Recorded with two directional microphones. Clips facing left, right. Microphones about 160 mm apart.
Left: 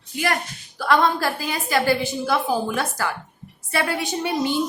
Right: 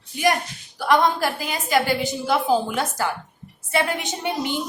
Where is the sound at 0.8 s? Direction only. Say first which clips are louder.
Even; 15° right (ahead or behind).